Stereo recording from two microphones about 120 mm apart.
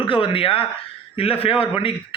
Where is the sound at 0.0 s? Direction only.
45° left (ahead or behind).